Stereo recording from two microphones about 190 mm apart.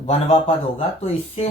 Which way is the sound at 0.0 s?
35° left (ahead or behind).